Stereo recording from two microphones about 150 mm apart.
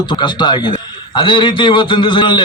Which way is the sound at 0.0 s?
30° left (ahead or behind).